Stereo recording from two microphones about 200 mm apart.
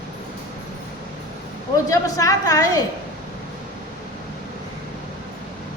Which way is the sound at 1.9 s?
15° left (ahead or behind).